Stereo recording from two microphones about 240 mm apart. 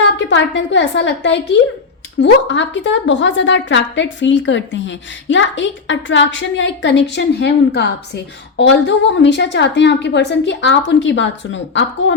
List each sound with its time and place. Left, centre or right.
0.2 s a woman's voice: left